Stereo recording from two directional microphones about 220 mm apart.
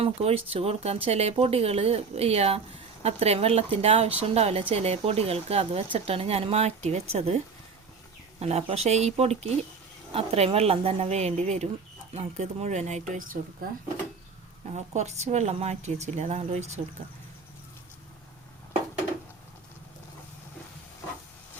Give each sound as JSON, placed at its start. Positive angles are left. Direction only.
{"t": 0.0, "sound": "speech", "side_deg": -25}
{"t": 14.7, "sound": "speech", "side_deg": -30}